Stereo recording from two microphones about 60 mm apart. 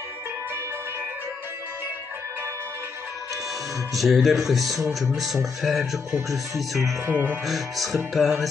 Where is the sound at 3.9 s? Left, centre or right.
Centre.